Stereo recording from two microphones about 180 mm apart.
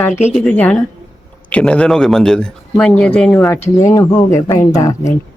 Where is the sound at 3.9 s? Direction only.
15° left (ahead or behind).